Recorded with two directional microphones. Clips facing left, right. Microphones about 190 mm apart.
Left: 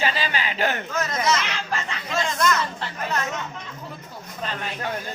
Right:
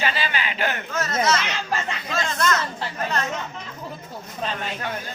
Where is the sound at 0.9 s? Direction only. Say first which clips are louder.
Right 1 dB; 15° left (ahead or behind).